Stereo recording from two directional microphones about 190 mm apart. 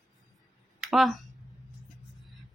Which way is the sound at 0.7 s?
Centre (ahead or behind).